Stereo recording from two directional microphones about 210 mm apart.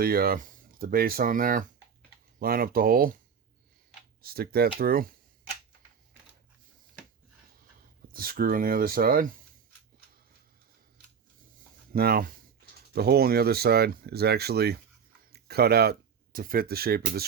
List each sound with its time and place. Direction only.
0.0 s speech: 45° right (ahead or behind)
4.2 s speech: 45° right (ahead or behind)
8.1 s speech: 45° right (ahead or behind)
11.9 s speech: 45° right (ahead or behind)